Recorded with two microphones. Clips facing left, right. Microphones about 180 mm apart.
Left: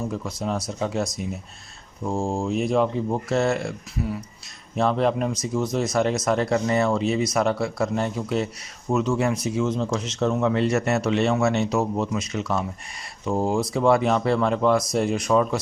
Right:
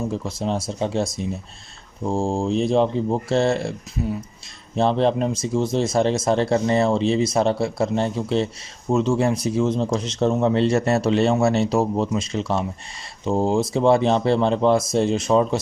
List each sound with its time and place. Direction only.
0.1 s speech: 25° right (ahead or behind)